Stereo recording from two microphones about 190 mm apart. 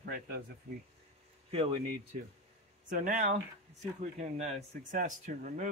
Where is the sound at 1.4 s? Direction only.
30° right (ahead or behind).